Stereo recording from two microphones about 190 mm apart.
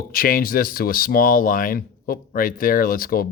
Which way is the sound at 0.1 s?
50° left (ahead or behind).